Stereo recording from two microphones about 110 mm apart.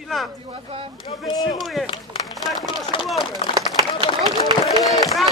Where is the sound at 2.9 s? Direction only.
50° left (ahead or behind).